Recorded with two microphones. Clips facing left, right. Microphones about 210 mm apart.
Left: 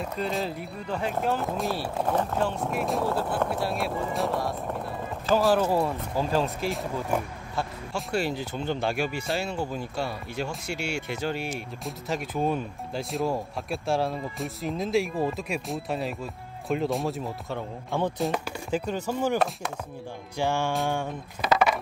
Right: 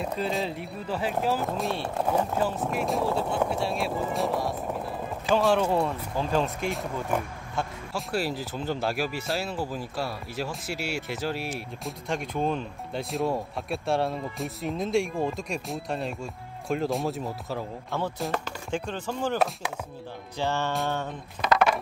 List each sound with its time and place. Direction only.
0.2 s speech: centre (ahead or behind)
18.3 s chopping: 10° left (ahead or behind)
20.3 s chopping: 10° left (ahead or behind)
20.9 s speech: 10° left (ahead or behind)